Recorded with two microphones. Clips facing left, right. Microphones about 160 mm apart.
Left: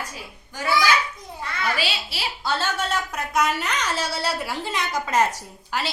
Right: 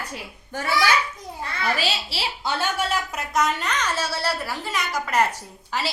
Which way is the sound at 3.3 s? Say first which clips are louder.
Even; 5° left (ahead or behind).